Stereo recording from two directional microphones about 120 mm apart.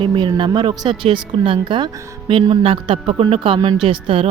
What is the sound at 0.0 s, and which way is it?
Speech, 40° right (ahead or behind).